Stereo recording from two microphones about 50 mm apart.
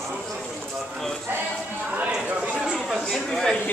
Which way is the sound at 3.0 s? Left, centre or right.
Centre.